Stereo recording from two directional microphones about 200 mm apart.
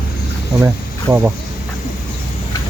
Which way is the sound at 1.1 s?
10° right (ahead or behind).